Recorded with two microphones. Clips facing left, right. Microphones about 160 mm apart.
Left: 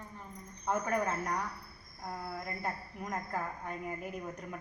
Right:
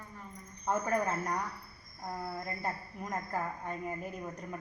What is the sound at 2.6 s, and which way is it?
A woman's voice, centre (ahead or behind).